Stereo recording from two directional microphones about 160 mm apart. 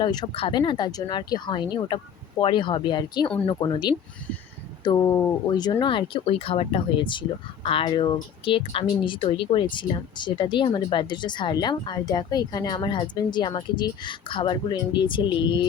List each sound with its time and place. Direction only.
0.0 s speech: 25° left (ahead or behind)